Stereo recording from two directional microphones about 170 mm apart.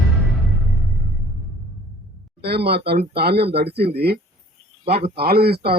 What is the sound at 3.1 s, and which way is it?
A man's voice, 70° right (ahead or behind).